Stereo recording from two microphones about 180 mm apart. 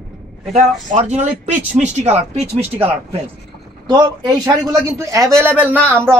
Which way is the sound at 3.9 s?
20° right (ahead or behind).